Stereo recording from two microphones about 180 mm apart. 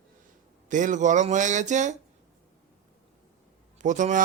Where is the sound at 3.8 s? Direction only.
45° right (ahead or behind).